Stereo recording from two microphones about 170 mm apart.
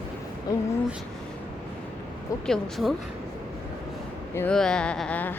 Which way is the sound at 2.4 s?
Centre (ahead or behind).